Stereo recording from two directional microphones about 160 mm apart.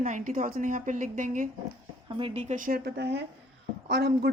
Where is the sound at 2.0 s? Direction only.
35° right (ahead or behind).